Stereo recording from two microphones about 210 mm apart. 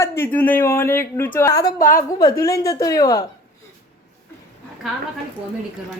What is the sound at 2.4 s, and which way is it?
Speech, 15° left (ahead or behind).